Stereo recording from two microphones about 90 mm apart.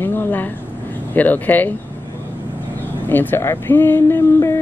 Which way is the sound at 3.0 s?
25° left (ahead or behind).